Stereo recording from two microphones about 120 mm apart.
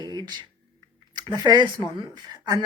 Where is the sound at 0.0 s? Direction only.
35° right (ahead or behind).